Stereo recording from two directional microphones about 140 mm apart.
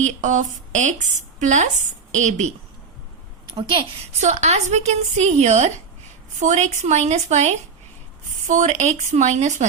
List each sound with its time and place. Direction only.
0.0 s speech: 60° right (ahead or behind)
3.5 s a woman's voice: 35° right (ahead or behind)
4.2 s speech: 55° right (ahead or behind)